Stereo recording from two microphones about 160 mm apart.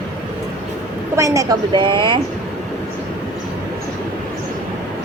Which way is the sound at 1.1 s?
20° right (ahead or behind).